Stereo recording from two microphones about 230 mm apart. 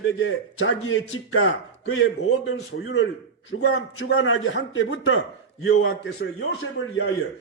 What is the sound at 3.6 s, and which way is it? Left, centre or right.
A man's voice, left.